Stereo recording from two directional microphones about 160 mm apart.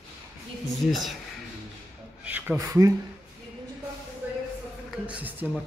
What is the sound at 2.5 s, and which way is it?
Speech, 20° right (ahead or behind).